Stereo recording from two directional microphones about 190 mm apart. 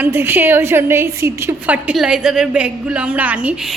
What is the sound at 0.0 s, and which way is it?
A woman's voice, 10° right (ahead or behind).